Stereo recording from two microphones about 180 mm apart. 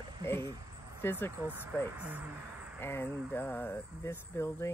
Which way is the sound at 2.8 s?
10° left (ahead or behind).